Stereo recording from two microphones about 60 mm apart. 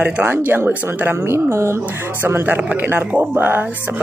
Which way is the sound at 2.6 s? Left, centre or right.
Right.